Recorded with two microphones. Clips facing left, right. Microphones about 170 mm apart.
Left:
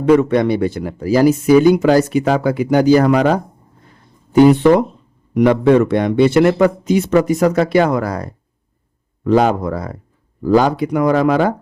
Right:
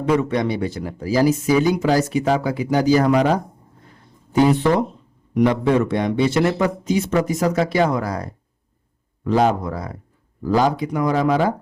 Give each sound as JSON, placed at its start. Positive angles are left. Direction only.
{"t": 0.0, "sound": "speech", "side_deg": 60}
{"t": 4.4, "sound": "speech", "side_deg": 70}
{"t": 9.2, "sound": "speech", "side_deg": 70}